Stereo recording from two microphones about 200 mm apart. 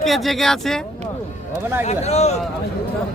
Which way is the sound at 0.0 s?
Centre (ahead or behind).